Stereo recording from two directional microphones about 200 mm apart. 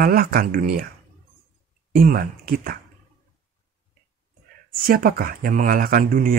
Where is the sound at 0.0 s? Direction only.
50° right (ahead or behind).